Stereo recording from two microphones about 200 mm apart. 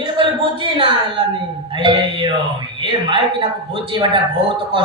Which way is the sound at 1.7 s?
25° right (ahead or behind).